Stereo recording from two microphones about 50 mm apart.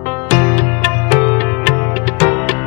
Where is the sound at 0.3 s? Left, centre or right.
Left.